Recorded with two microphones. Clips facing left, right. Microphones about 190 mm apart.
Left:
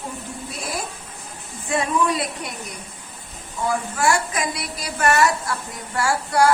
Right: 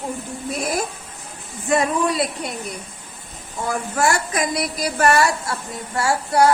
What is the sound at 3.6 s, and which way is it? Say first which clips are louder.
A woman's voice: even; 40° right (ahead or behind).